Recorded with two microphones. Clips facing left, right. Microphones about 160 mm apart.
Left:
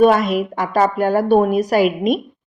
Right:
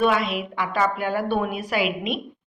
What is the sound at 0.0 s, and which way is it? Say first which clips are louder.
A woman's voice: left 8 dB; 45° left (ahead or behind).